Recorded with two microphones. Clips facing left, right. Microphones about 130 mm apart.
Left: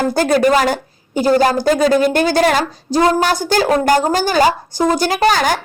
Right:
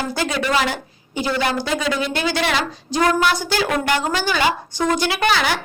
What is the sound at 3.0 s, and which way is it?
Speech, 30° left (ahead or behind).